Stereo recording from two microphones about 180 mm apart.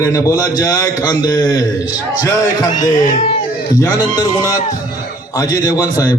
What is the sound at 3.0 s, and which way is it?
Speech, 35° left (ahead or behind).